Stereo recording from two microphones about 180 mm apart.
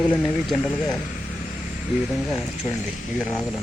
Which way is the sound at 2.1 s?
Centre (ahead or behind).